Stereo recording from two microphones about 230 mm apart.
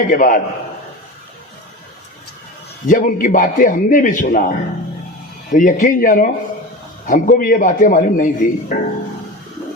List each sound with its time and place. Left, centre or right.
0.1 s a man's voice: left
2.8 s a man's voice: left